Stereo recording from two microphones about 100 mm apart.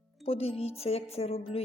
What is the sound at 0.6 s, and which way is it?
Music, 90° left.